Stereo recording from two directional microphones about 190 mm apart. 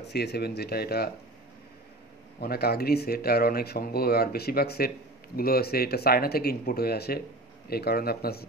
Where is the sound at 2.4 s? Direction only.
55° left (ahead or behind).